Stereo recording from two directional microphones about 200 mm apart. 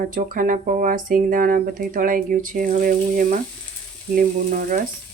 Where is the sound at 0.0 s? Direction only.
45° right (ahead or behind).